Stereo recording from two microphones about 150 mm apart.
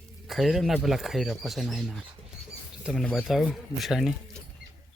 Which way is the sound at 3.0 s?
10° left (ahead or behind).